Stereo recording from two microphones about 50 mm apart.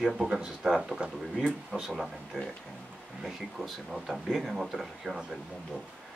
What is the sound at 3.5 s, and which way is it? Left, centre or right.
Speech, centre.